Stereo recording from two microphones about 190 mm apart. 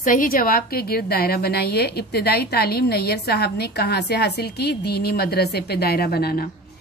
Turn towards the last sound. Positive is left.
turn(degrees=55)  # may be behind; listen again after turning